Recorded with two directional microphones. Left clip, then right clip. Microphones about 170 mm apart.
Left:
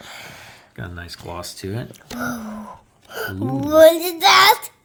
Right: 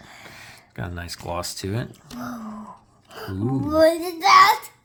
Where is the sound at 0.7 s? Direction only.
25° right (ahead or behind).